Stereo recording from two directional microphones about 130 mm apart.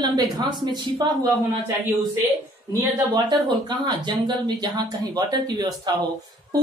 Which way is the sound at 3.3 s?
35° right (ahead or behind).